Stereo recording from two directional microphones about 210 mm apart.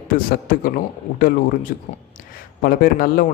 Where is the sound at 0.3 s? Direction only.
40° left (ahead or behind).